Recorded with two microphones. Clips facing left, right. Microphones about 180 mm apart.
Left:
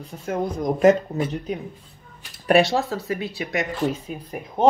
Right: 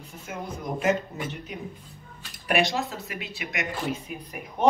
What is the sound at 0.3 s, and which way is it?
Speech, 35° left (ahead or behind).